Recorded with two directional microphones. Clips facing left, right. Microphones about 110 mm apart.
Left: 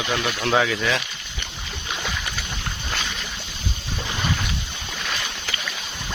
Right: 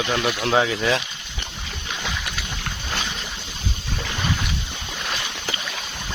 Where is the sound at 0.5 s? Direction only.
30° right (ahead or behind).